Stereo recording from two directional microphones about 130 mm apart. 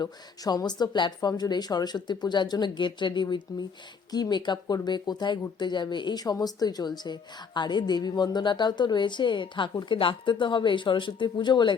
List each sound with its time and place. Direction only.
0.0 s a woman's voice: 30° left (ahead or behind)